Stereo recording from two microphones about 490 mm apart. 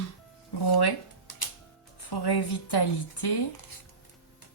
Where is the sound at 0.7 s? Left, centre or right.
Left.